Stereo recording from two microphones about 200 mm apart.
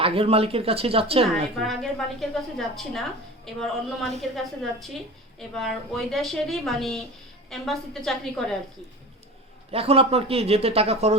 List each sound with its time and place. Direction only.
0.0 s speech: 30° right (ahead or behind)
1.5 s a woman's voice: centre (ahead or behind)
9.7 s speech: 30° right (ahead or behind)